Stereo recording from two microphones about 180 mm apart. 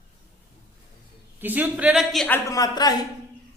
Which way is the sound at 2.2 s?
15° left (ahead or behind).